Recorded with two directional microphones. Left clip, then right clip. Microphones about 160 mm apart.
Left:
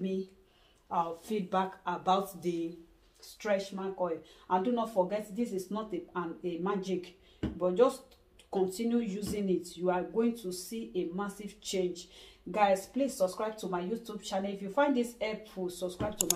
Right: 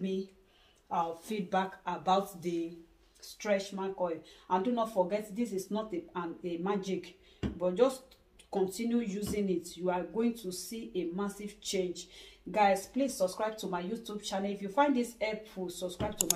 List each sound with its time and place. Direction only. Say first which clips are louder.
0.8 s speech: left 1 dB; 10° left (ahead or behind)
16.3 s speech: even; centre (ahead or behind)